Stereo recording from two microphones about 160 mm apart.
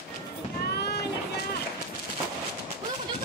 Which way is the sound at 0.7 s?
90° left.